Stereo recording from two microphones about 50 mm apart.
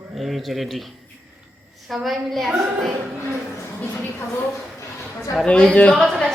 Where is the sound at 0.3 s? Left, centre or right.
Centre.